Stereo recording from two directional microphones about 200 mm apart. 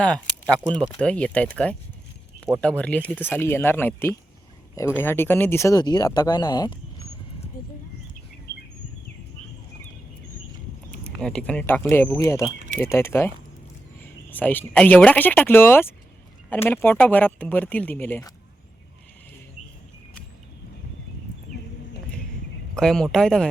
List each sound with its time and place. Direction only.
0.0 s speech: 5° left (ahead or behind); by 7.1 s 20° left (ahead or behind)
7.6 s a sound: 45° left (ahead or behind)
11.2 s speech: 5° left (ahead or behind)
22.7 s speech: 5° left (ahead or behind)